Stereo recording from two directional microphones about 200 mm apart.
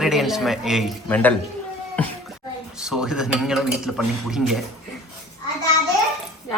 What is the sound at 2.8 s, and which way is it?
A man's voice, 5° right (ahead or behind).